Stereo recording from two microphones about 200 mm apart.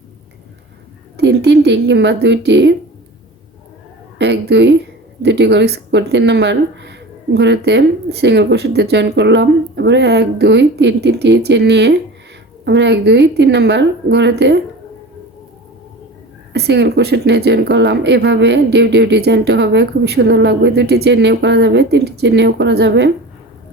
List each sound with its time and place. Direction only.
1.1 s speech: 55° right (ahead or behind)
4.2 s speech: 60° right (ahead or behind)
16.5 s speech: 55° right (ahead or behind)